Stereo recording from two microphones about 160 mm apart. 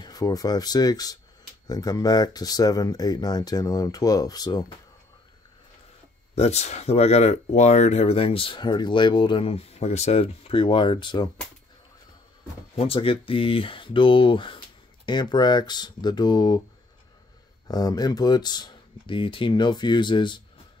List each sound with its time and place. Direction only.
0.0 s speech: 25° left (ahead or behind)
6.3 s speech: 40° left (ahead or behind)
12.7 s speech: 35° left (ahead or behind)
17.6 s speech: 25° left (ahead or behind)